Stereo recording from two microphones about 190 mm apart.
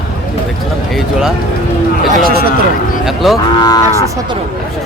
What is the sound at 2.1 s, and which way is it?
Speech, 50° right (ahead or behind).